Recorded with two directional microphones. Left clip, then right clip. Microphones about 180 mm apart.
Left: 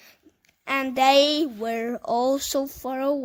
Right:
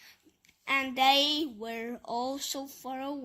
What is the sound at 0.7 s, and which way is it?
Speech, 55° left (ahead or behind).